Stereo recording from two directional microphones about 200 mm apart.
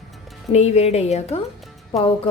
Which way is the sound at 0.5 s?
30° left (ahead or behind).